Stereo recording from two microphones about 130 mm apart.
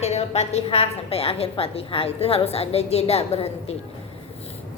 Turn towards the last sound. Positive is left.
turn(degrees=55)  # may be behind; listen again after turning